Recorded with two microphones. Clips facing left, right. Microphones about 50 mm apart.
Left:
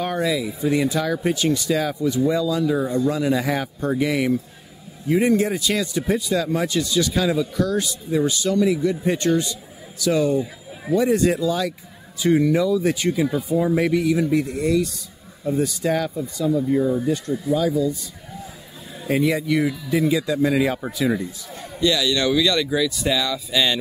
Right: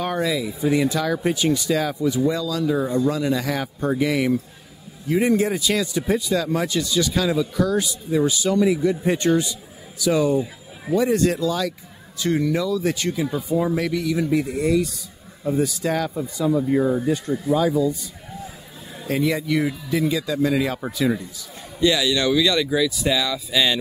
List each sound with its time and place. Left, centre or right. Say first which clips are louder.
0.0 s speech: left 1 dB; centre
2.2 s speech: left 2 dB; centre
2.6 s speech: even; centre
3.6 s speech: even; centre
7.6 s speech: right 1 dB; centre
13.7 s speech: left 4 dB; centre
14.1 s speech: left 1 dB; centre
16.2 s speech: even; centre
16.7 s speech: even; right
17.5 s speech: right 1 dB; centre
19.0 s speech: left 2 dB; centre
21.7 s speech: right 1 dB; centre
22.1 s speech: even; centre